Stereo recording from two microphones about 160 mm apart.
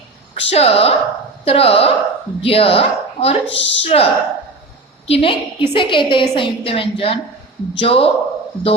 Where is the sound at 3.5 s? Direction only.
90° left.